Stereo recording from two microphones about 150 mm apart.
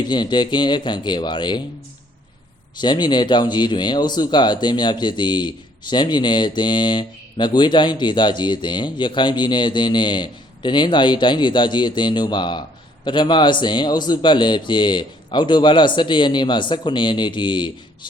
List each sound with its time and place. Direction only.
0.0 s speech: 30° left (ahead or behind)
2.8 s speech: 30° left (ahead or behind)